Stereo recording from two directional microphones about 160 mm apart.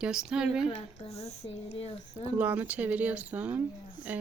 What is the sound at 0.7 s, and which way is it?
Speech, 35° left (ahead or behind).